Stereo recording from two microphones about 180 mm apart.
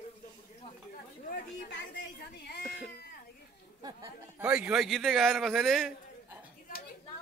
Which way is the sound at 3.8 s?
15° right (ahead or behind).